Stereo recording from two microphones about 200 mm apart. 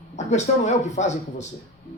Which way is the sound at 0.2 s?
35° left (ahead or behind).